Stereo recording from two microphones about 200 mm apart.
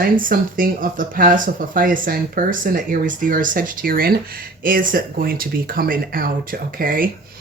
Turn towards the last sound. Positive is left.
turn(degrees=-45)  # may be behind; listen again after turning